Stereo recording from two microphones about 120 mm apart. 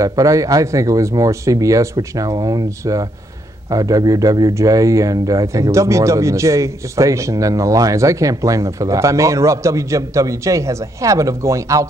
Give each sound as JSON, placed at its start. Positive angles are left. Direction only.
{"t": 0.0, "sound": "speech", "side_deg": -25}